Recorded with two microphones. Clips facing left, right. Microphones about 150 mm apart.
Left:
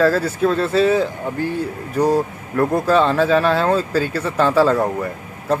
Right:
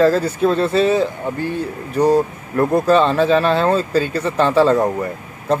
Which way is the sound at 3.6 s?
10° left (ahead or behind).